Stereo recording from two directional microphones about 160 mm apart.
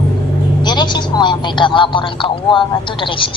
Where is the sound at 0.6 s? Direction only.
30° left (ahead or behind).